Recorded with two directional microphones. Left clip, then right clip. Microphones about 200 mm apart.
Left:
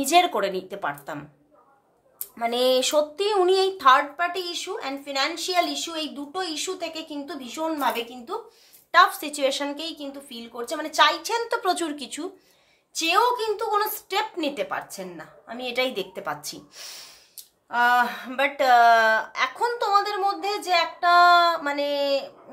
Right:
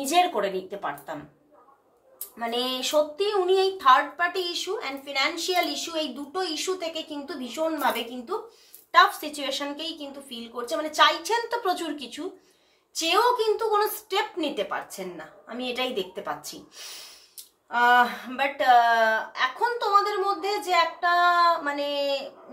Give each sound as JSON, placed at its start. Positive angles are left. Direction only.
{"t": 0.0, "sound": "a woman's voice", "side_deg": 40}
{"t": 2.3, "sound": "speech", "side_deg": 35}
{"t": 8.9, "sound": "speech", "side_deg": 35}
{"t": 12.9, "sound": "speech", "side_deg": 30}